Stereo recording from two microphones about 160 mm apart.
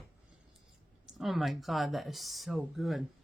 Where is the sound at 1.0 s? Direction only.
Centre (ahead or behind).